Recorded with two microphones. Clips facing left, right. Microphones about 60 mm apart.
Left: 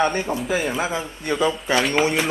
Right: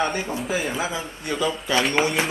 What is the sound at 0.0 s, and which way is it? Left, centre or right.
Speech, centre.